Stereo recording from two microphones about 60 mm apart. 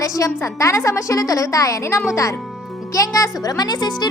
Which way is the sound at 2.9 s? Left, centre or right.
Left.